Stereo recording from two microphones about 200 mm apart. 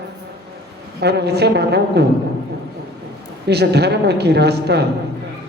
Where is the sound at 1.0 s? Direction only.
55° right (ahead or behind).